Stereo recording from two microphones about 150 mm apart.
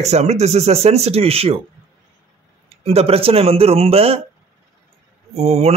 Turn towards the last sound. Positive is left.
turn(degrees=-45)  # may be behind; listen again after turning